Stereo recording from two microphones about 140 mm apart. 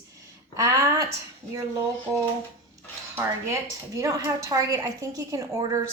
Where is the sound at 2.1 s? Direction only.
25° right (ahead or behind).